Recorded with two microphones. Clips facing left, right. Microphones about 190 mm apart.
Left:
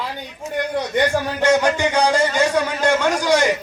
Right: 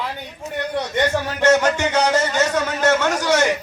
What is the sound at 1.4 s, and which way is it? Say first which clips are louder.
A man's voice: right 1 dB; 10° left (ahead or behind).